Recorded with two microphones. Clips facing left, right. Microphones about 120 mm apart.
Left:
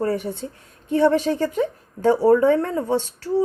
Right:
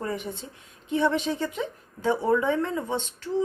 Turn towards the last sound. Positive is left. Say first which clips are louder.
# left 7 dB
turn(degrees=40)  # may be behind; listen again after turning